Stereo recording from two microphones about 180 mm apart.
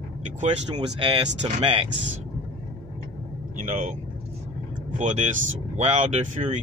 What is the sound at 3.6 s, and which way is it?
Speech, 45° right (ahead or behind).